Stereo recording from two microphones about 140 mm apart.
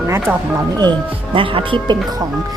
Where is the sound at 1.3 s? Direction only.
40° right (ahead or behind).